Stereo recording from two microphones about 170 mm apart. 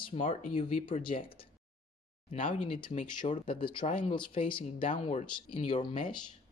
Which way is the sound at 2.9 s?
45° left (ahead or behind).